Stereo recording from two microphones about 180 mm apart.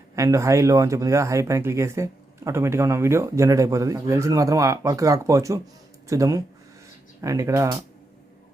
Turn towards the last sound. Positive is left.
turn(degrees=-15)  # may be behind; listen again after turning